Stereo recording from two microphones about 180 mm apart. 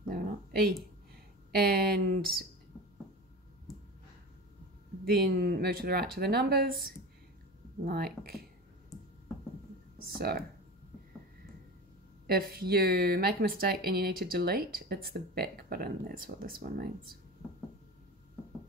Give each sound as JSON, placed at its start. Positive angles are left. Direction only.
{"t": 0.1, "sound": "a sound", "side_deg": -55}
{"t": 1.5, "sound": "speech", "side_deg": -55}
{"t": 5.0, "sound": "speech", "side_deg": -55}
{"t": 7.8, "sound": "speech", "side_deg": -60}
{"t": 10.0, "sound": "speech", "side_deg": -55}
{"t": 12.3, "sound": "speech", "side_deg": -55}